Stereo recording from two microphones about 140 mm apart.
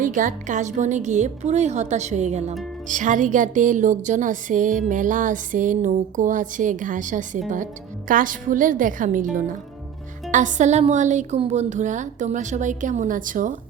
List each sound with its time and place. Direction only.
0.0 s speech: 70° right (ahead or behind); by 2.6 s 50° right (ahead or behind)
2.8 s speech: 70° right (ahead or behind)
10.3 s speech: 60° right (ahead or behind)